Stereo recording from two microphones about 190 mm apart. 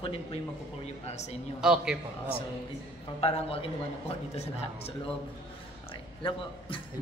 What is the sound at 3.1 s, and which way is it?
A man's voice, 30° left (ahead or behind).